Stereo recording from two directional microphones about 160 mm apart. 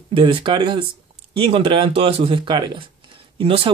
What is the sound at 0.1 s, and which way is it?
Speech, 35° right (ahead or behind).